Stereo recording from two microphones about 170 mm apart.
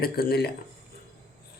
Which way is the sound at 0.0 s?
65° left (ahead or behind).